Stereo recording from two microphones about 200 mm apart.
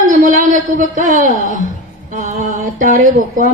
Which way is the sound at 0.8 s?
40° right (ahead or behind).